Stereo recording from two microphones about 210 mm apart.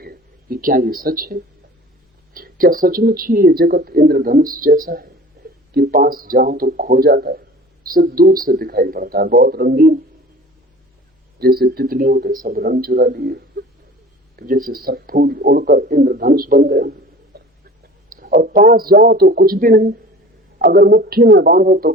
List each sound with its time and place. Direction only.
0.0 s speech: 45° right (ahead or behind)
11.3 s speech: 45° right (ahead or behind)
17.3 s a sound: 50° right (ahead or behind)
18.1 s speech: 45° right (ahead or behind)